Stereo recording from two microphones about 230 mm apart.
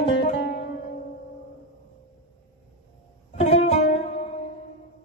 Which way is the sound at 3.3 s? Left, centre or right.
Left.